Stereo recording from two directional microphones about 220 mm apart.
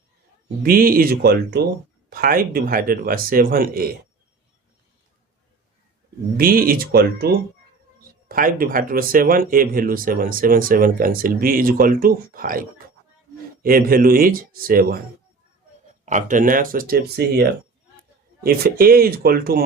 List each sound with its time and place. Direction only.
0.6 s speech: 40° right (ahead or behind)
6.3 s speech: 40° right (ahead or behind)
8.3 s speech: 40° right (ahead or behind)
16.0 s speech: 35° right (ahead or behind)
18.4 s speech: 45° right (ahead or behind)